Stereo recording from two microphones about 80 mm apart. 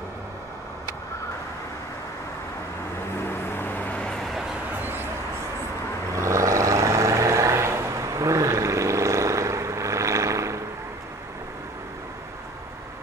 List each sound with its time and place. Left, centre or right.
3.3 s vehicle: left
4.0 s vehicle: centre
4.7 s a sound: right
6.1 s vehicle: right